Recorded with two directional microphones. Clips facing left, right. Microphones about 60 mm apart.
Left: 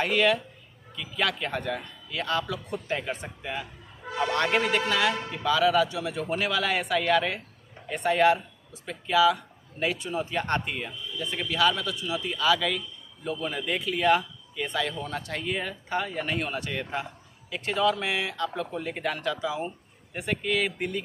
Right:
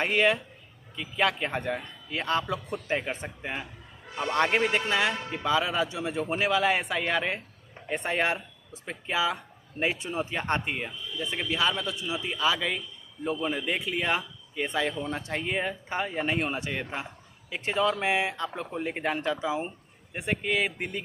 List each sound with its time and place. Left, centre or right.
0.0 s speech: centre